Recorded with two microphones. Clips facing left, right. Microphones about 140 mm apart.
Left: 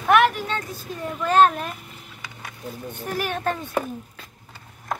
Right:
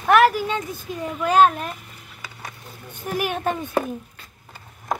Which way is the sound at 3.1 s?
15° right (ahead or behind).